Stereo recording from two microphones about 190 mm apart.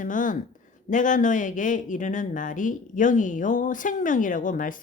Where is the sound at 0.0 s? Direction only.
45° left (ahead or behind).